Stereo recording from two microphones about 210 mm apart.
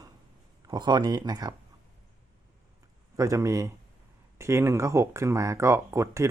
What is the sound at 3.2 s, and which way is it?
Speech, 15° right (ahead or behind).